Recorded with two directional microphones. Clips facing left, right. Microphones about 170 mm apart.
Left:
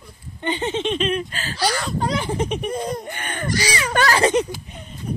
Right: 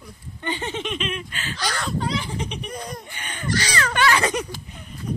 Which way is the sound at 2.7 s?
25° left (ahead or behind).